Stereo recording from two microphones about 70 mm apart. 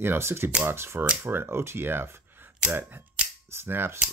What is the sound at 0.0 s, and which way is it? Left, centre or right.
Speech, right.